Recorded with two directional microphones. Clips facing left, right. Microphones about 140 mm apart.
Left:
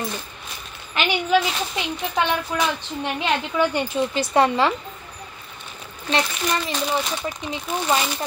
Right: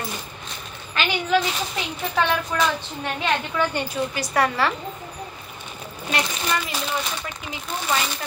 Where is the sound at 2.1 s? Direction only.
15° left (ahead or behind).